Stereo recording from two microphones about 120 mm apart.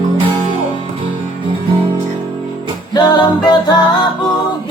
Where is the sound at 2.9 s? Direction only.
35° left (ahead or behind).